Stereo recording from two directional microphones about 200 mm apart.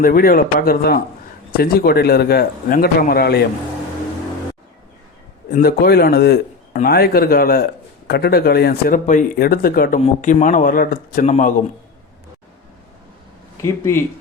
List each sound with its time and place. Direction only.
0.0 s a man's voice: 45° left (ahead or behind)
5.5 s a man's voice: 50° left (ahead or behind)
13.6 s speech: 15° left (ahead or behind)